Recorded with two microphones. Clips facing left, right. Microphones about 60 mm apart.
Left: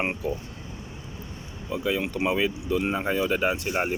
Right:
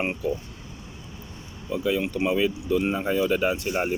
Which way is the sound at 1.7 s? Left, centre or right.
Left.